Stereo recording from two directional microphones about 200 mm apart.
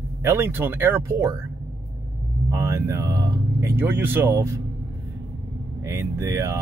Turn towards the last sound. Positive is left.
turn(degrees=-15)  # may be behind; listen again after turning